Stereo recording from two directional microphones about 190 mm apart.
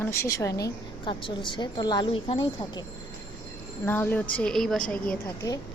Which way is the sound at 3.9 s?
10° left (ahead or behind).